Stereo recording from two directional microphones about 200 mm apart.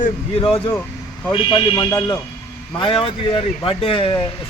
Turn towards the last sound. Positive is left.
turn(degrees=25)  # may be behind; listen again after turning